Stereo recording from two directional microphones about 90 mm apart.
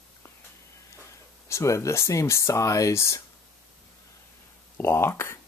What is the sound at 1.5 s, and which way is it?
Speech, 35° left (ahead or behind).